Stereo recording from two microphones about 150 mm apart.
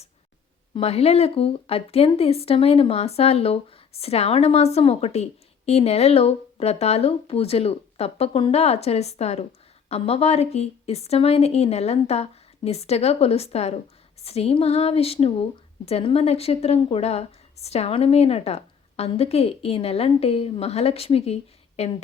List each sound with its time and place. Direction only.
0.7 s speech: 40° left (ahead or behind)